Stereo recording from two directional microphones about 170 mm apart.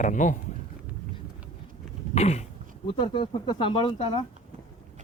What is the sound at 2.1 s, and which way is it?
Speech, 40° left (ahead or behind).